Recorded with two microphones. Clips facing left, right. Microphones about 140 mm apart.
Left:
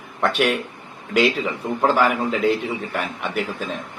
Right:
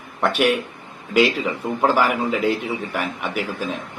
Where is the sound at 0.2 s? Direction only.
5° right (ahead or behind).